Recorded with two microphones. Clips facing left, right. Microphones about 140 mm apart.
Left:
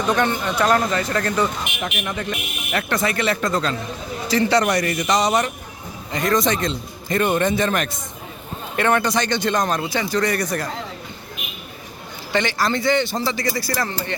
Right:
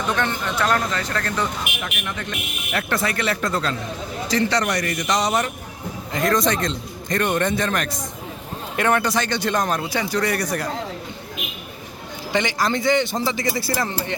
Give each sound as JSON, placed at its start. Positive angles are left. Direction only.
{"t": 0.1, "sound": "speech", "side_deg": 15}
{"t": 2.7, "sound": "a man's voice", "side_deg": 0}
{"t": 12.3, "sound": "speech", "side_deg": -15}